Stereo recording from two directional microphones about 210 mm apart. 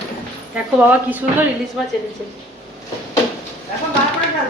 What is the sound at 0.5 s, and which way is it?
Speech, 5° right (ahead or behind).